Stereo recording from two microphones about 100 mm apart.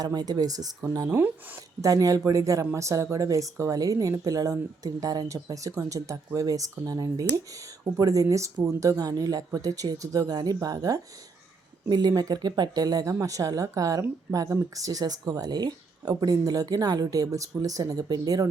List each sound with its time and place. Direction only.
0.0 s speech: 40° right (ahead or behind)
1.0 s speech: 20° right (ahead or behind)
1.8 s speech: 35° right (ahead or behind)